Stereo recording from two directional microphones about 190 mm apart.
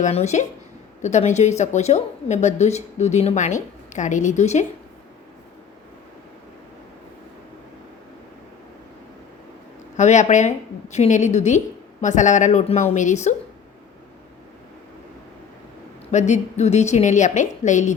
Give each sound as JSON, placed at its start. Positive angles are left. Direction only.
{"t": 0.0, "sound": "a woman's voice", "side_deg": 35}
{"t": 10.0, "sound": "a woman's voice", "side_deg": 40}
{"t": 16.1, "sound": "a woman's voice", "side_deg": 40}